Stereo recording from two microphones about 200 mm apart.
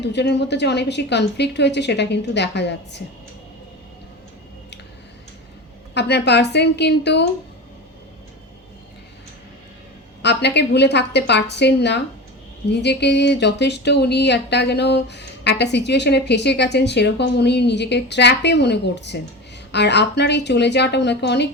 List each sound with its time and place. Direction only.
0.0 s speech: 60° left (ahead or behind)
5.9 s speech: 55° left (ahead or behind)
10.2 s speech: 60° left (ahead or behind)